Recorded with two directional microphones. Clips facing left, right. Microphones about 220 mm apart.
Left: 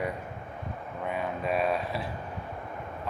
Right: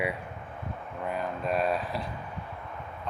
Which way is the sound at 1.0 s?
Centre (ahead or behind).